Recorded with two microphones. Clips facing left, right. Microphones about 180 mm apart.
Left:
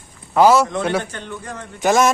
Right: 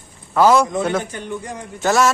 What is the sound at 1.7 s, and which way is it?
Speech, 15° left (ahead or behind).